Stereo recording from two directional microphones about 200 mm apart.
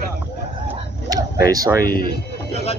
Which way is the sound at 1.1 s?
15° right (ahead or behind).